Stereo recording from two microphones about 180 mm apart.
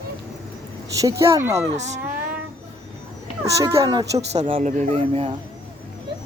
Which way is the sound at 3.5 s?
15° right (ahead or behind).